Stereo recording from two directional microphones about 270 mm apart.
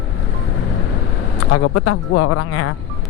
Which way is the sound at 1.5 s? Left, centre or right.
Left.